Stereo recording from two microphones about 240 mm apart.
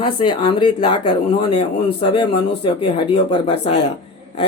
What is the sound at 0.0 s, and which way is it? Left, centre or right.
Speech, centre.